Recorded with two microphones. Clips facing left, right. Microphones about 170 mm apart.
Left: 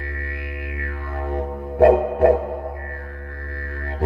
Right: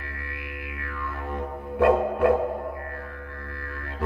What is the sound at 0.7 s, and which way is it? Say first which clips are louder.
Music: left 3 dB; 50° left (ahead or behind).